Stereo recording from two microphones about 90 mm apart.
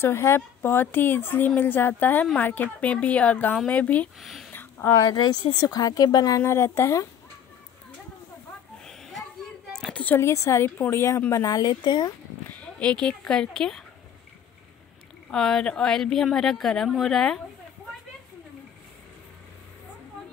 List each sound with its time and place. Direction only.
0.0 s a woman's voice: 30° left (ahead or behind)
4.2 s speech: centre (ahead or behind)
4.5 s a sound: 20° left (ahead or behind)
5.1 s speech: 55° left (ahead or behind)
6.4 s speech: 30° left (ahead or behind)
8.8 s a sound: 5° left (ahead or behind)
10.0 s speech: 30° left (ahead or behind)
11.4 s speech: 50° left (ahead or behind)
12.4 s speech: 15° left (ahead or behind)
15.3 s speech: 5° left (ahead or behind)